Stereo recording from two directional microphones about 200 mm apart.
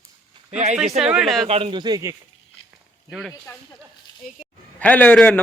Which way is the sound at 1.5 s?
30° right (ahead or behind).